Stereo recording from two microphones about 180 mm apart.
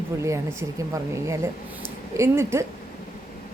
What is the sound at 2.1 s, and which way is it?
Speech, 15° right (ahead or behind).